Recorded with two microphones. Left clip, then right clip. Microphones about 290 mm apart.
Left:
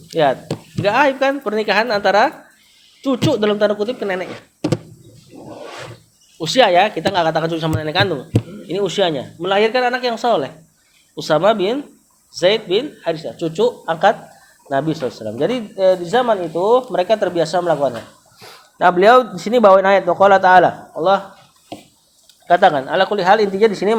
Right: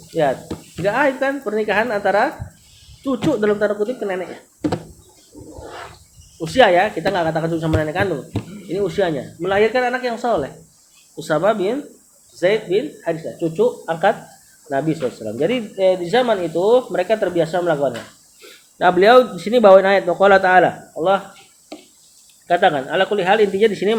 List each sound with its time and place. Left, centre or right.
0.1 s speech: left
6.4 s speech: left
18.3 s speech: centre
22.4 s speech: left